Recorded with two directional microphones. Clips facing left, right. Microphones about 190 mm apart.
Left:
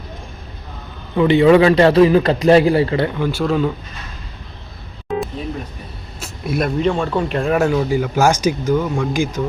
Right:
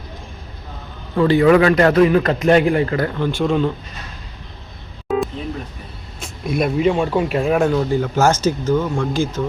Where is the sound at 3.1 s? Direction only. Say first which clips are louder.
Even; 10° left (ahead or behind).